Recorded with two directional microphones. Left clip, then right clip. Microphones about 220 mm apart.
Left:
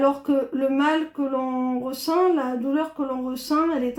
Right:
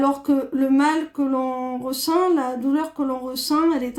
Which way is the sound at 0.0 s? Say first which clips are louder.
Even; 50° right (ahead or behind).